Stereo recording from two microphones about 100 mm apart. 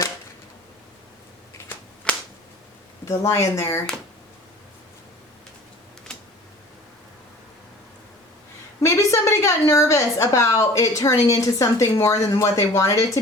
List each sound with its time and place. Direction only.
2.1 s a sound: 10° left (ahead or behind)
3.1 s speech: 30° left (ahead or behind)
8.8 s a woman's voice: 30° left (ahead or behind)